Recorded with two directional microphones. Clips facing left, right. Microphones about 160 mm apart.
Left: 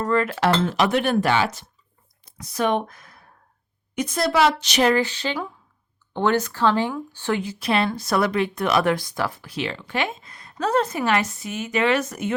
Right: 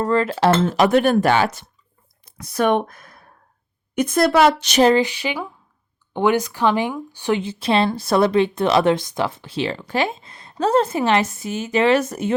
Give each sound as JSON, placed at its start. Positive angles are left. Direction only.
{"t": 0.0, "sound": "speech", "side_deg": -30}
{"t": 0.5, "sound": "a woman's voice", "side_deg": -45}
{"t": 4.9, "sound": "speech", "side_deg": -15}